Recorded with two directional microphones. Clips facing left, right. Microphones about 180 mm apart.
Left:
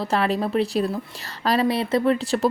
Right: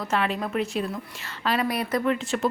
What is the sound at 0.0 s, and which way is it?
A woman's voice, 35° left (ahead or behind).